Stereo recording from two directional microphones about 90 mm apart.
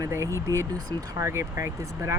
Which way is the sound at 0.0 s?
35° right (ahead or behind).